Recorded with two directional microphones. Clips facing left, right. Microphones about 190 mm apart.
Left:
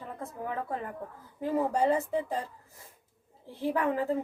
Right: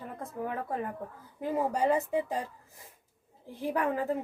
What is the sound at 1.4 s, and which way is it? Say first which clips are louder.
Speech: left 1 dB; 15° right (ahead or behind).